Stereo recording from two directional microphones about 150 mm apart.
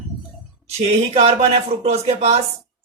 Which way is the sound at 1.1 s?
45° right (ahead or behind).